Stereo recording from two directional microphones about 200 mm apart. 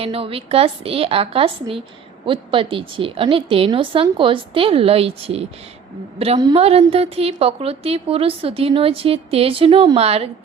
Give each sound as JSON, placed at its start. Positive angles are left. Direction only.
{"t": 0.0, "sound": "a woman's voice", "side_deg": -30}